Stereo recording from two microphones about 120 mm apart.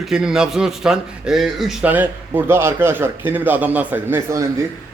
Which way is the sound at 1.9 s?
15° right (ahead or behind).